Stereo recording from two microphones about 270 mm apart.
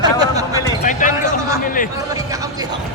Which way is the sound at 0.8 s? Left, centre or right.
Left.